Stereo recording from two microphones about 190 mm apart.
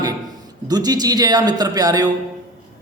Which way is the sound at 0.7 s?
20° right (ahead or behind).